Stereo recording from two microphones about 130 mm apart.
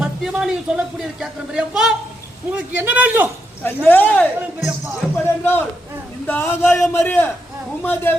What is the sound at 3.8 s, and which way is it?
A man's voice, 15° left (ahead or behind).